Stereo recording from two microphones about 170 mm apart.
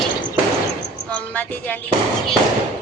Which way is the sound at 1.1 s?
10° left (ahead or behind).